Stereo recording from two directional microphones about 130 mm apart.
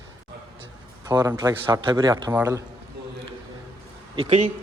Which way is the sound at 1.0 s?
25° right (ahead or behind).